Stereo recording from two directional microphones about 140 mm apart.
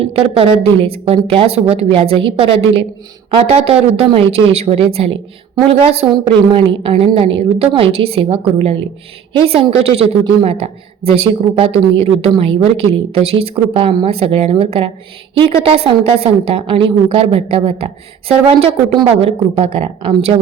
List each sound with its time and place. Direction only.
0.0 s a woman's voice: 40° right (ahead or behind)